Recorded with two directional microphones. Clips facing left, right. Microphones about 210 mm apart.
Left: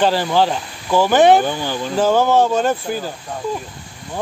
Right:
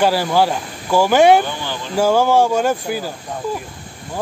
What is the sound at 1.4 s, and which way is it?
Speech, 45° left (ahead or behind).